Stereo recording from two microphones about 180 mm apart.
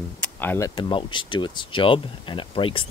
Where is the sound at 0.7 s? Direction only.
25° left (ahead or behind).